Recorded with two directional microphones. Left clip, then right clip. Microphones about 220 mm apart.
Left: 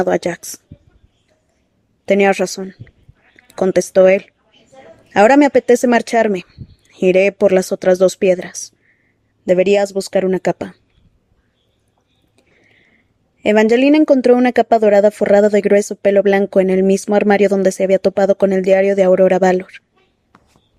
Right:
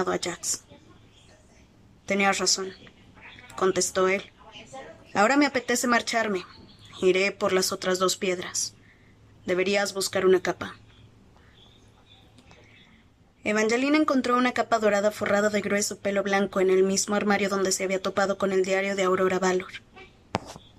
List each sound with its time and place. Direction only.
0.0 s speech: 35° left (ahead or behind)
2.0 s speech: 35° left (ahead or behind)
13.4 s speech: 35° left (ahead or behind)